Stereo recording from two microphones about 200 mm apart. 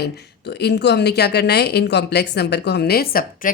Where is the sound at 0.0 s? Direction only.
55° left (ahead or behind).